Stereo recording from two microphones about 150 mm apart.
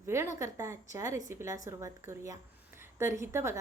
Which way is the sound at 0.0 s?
20° right (ahead or behind).